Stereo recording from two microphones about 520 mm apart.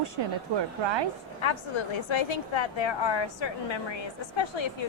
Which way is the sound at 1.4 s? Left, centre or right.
Left.